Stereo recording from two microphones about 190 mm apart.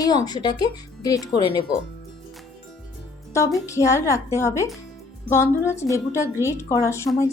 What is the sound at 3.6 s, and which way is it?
Speech, 15° left (ahead or behind).